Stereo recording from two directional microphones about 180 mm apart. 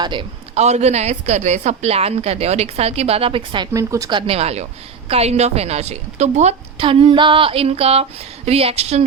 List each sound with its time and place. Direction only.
0.0 s a man's voice: 25° right (ahead or behind)
0.6 s a woman's voice: 40° right (ahead or behind)
3.7 s speech: 15° right (ahead or behind)
4.3 s a woman's voice: 35° right (ahead or behind)